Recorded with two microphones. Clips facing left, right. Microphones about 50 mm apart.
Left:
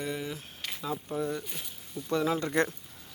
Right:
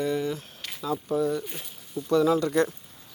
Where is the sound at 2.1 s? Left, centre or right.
Left.